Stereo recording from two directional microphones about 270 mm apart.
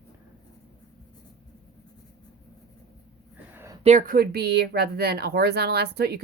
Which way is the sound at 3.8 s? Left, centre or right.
Right.